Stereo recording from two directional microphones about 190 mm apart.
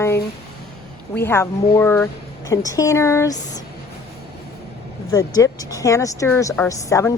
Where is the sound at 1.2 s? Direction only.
10° left (ahead or behind).